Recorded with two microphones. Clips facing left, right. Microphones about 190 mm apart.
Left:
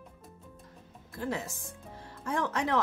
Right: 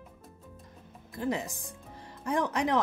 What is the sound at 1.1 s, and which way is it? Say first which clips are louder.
A woman's voice: right 3 dB; 15° right (ahead or behind).